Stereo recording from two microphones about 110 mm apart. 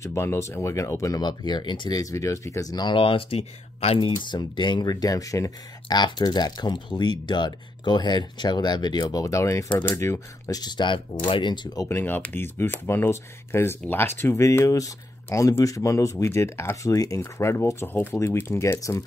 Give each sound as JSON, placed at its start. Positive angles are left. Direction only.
{"t": 0.0, "sound": "speech", "side_deg": 25}
{"t": 1.2, "sound": "speech", "side_deg": 40}
{"t": 4.3, "sound": "speech", "side_deg": 45}
{"t": 9.0, "sound": "speech", "side_deg": 30}
{"t": 9.8, "sound": "speech", "side_deg": 15}
{"t": 10.0, "sound": "speech", "side_deg": 25}
{"t": 11.9, "sound": "speech", "side_deg": 15}